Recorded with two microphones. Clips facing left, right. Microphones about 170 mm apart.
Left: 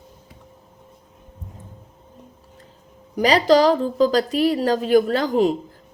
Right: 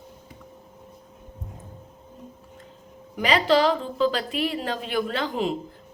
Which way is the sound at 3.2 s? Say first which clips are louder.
Left 5 dB; 40° left (ahead or behind).